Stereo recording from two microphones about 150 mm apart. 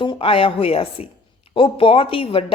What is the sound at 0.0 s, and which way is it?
Speech, 35° left (ahead or behind).